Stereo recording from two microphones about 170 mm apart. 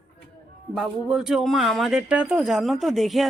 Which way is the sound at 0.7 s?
Centre (ahead or behind).